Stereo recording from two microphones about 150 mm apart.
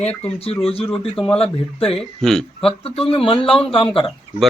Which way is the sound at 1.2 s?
5° left (ahead or behind).